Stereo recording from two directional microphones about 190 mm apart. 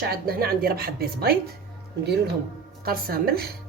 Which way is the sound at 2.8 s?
50° right (ahead or behind).